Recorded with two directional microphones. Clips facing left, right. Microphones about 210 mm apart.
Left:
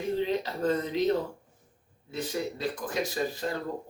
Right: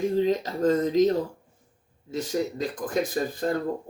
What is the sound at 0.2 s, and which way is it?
Speech, 40° right (ahead or behind).